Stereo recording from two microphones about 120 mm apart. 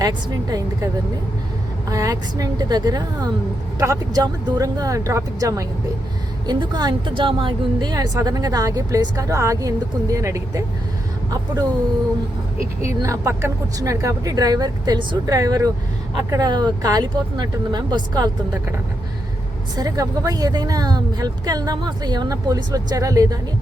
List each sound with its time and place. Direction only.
0.0 s a woman's voice: 30° right (ahead or behind)
1.9 s a woman's voice: 30° right (ahead or behind)
13.0 s a woman's voice: 25° right (ahead or behind)
19.7 s a woman's voice: 30° right (ahead or behind)